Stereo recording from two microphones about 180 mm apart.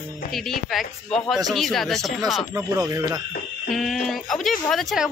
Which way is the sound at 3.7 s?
Centre (ahead or behind).